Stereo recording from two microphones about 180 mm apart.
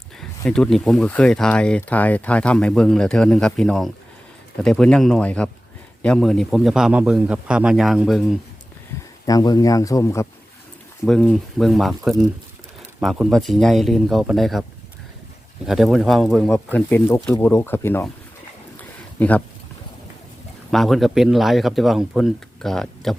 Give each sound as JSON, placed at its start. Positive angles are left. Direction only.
{"t": 0.4, "sound": "speech", "side_deg": 5}
{"t": 9.2, "sound": "speech", "side_deg": 20}
{"t": 11.0, "sound": "speech", "side_deg": 5}
{"t": 15.6, "sound": "speech", "side_deg": 0}
{"t": 18.8, "sound": "a sound", "side_deg": 10}
{"t": 20.7, "sound": "speech", "side_deg": 0}